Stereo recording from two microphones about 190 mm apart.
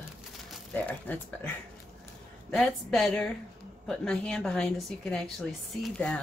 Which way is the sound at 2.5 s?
Centre (ahead or behind).